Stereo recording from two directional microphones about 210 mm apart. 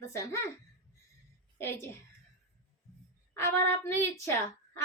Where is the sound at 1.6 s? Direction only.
10° left (ahead or behind).